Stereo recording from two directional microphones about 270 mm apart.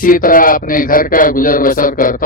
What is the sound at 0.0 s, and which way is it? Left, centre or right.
A man's voice, left.